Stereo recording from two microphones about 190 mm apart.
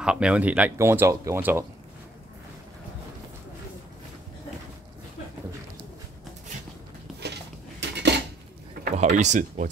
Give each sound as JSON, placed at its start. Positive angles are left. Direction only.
{"t": 0.0, "sound": "speech", "side_deg": -5}
{"t": 7.8, "sound": "dishes", "side_deg": -60}
{"t": 8.9, "sound": "speech", "side_deg": -40}